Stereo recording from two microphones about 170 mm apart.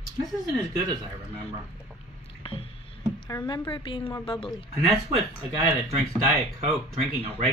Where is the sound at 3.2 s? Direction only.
25° left (ahead or behind).